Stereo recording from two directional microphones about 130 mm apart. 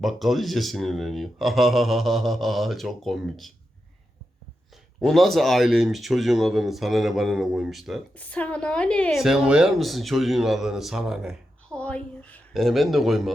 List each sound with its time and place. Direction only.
0.0 s speech: centre (ahead or behind)
4.9 s speech: centre (ahead or behind)
8.2 s speech: 10° left (ahead or behind); by 11.3 s 5° right (ahead or behind)
11.7 s a woman's voice: 10° left (ahead or behind)